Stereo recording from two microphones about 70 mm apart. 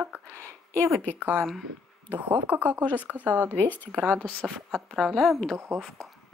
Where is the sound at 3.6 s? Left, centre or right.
Left.